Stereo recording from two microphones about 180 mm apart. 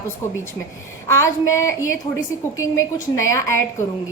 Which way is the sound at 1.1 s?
15° left (ahead or behind).